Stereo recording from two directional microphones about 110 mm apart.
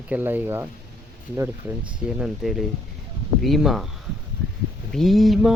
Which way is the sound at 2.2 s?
Centre (ahead or behind).